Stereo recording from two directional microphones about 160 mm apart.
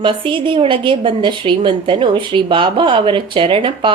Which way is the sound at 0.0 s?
30° right (ahead or behind).